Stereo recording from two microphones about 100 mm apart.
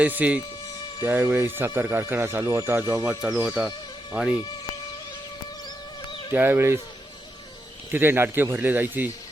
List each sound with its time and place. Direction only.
0.0 s speech: 15° right (ahead or behind)
3.0 s speech: 10° right (ahead or behind)
6.3 s speech: 20° right (ahead or behind)
7.9 s speech: 20° right (ahead or behind)